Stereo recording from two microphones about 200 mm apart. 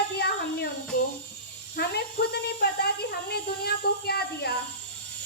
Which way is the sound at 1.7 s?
55° left (ahead or behind).